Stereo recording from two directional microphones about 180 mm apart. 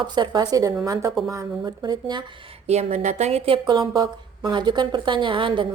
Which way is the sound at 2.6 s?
40° right (ahead or behind).